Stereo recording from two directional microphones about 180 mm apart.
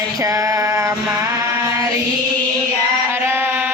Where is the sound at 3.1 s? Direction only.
10° right (ahead or behind).